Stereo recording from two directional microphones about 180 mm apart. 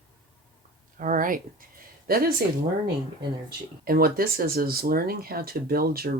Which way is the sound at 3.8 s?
55° right (ahead or behind).